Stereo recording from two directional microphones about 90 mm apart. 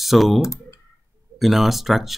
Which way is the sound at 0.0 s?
Centre (ahead or behind).